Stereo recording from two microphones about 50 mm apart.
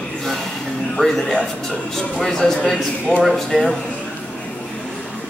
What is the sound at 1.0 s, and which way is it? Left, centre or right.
A man's voice, centre.